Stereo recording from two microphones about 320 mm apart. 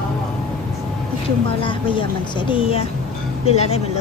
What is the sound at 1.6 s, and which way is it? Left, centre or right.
Speech, centre.